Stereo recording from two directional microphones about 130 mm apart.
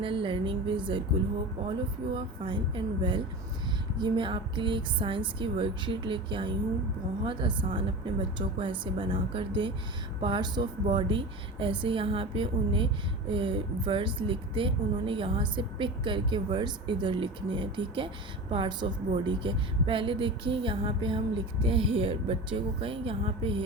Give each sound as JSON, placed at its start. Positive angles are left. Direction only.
{"t": 0.0, "sound": "a woman's voice", "side_deg": -40}
{"t": 2.1, "sound": "a woman's voice", "side_deg": -40}